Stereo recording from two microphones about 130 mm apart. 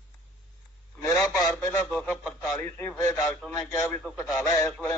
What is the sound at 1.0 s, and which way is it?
Speech, 25° left (ahead or behind).